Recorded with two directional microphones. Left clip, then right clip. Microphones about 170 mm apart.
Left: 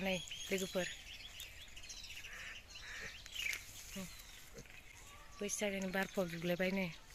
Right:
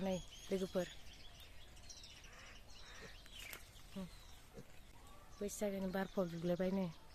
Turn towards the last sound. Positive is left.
turn(degrees=-10)  # may be behind; listen again after turning